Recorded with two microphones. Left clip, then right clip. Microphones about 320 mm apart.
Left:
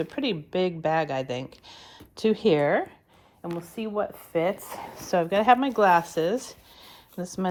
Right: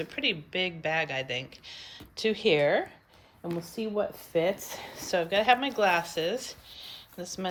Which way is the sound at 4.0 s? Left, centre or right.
Centre.